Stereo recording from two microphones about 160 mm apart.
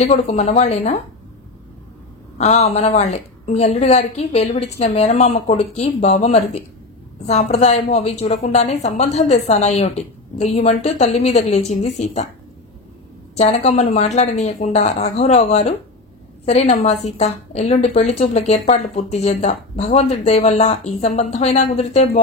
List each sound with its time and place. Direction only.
0.0 s a woman's voice: 45° left (ahead or behind)
2.3 s a woman's voice: 45° left (ahead or behind)
13.4 s a woman's voice: 40° left (ahead or behind)